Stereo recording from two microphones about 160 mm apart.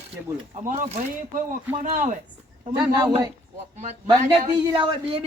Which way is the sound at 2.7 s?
25° right (ahead or behind).